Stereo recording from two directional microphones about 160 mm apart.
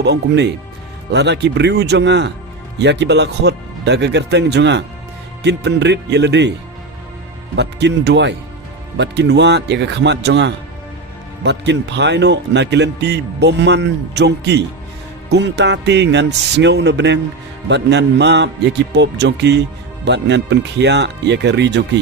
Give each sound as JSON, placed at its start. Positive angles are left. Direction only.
{"t": 0.0, "sound": "speech", "side_deg": -90}
{"t": 7.5, "sound": "speech", "side_deg": -90}